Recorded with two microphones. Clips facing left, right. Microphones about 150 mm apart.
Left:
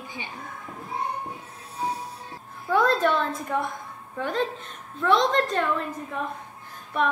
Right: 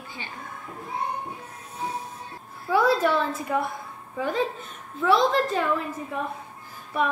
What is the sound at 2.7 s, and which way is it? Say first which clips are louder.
A woman's voice: even; 5° right (ahead or behind).